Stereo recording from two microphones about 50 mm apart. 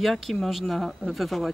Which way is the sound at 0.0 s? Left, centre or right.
Centre.